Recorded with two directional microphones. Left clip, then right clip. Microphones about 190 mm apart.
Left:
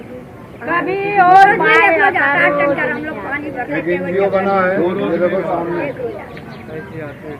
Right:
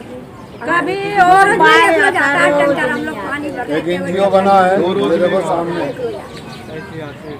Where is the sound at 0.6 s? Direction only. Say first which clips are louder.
Right 1 dB; 35° right (ahead or behind).